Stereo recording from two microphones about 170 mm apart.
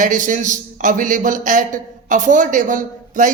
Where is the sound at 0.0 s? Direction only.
50° right (ahead or behind).